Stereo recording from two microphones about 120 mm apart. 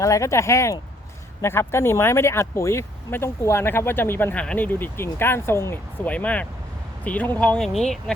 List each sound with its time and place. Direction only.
0.0 s speech: 25° left (ahead or behind); by 8.1 s 5° left (ahead or behind)